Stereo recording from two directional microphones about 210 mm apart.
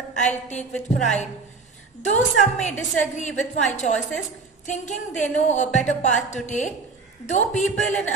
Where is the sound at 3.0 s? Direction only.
35° left (ahead or behind).